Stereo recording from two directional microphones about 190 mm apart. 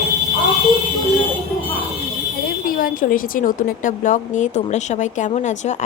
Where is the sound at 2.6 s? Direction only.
45° left (ahead or behind).